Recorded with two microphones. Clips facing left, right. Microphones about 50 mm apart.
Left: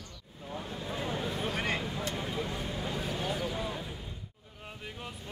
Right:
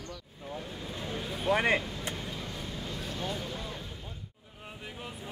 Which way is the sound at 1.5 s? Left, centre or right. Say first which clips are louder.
Right 5 dB; right.